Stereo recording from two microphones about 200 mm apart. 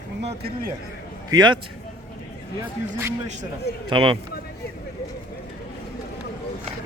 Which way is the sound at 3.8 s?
25° right (ahead or behind).